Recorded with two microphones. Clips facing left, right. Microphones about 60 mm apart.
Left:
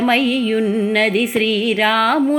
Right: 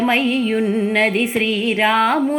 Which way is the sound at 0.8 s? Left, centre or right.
Right.